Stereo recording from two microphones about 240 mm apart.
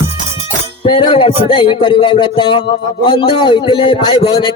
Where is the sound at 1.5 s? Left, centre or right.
Left.